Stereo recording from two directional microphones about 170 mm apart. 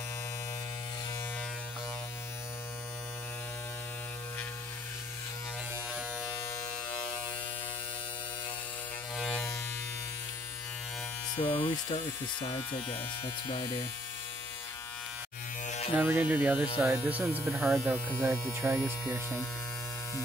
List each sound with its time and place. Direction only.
9.1 s electric shaver: 5° left (ahead or behind)
11.3 s mains hum: 25° left (ahead or behind)
11.9 s speech: 35° left (ahead or behind)
15.6 s electric shaver: 45° left (ahead or behind)
16.0 s mains hum: 10° right (ahead or behind)